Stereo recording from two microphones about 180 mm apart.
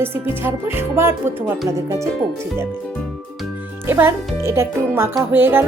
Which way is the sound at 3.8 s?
10° right (ahead or behind).